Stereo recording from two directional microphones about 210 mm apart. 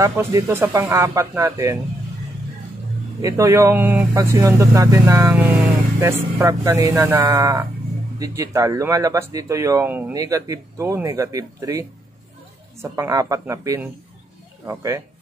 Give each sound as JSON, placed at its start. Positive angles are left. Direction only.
{"t": 0.0, "sound": "speech", "side_deg": -15}
{"t": 3.2, "sound": "speech", "side_deg": -15}
{"t": 12.8, "sound": "speech", "side_deg": -15}